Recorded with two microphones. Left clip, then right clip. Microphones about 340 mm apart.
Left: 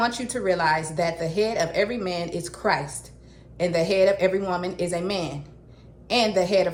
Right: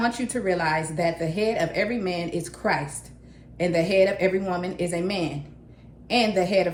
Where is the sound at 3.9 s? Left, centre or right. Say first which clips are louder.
Left 1 dB; left.